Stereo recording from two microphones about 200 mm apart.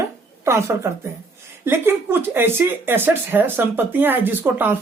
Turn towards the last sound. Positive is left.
turn(degrees=-10)  # may be behind; listen again after turning